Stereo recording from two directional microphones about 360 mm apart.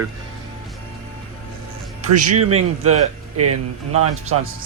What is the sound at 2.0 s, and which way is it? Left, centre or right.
Music, right.